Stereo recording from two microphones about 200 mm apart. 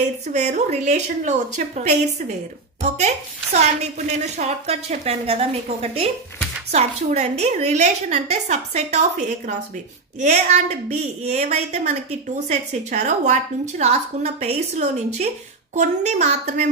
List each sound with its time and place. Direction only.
0.3 s a woman's voice: 35° right (ahead or behind)
10.2 s a woman's voice: 35° right (ahead or behind)